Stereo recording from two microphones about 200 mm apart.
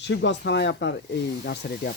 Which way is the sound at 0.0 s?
60° left (ahead or behind).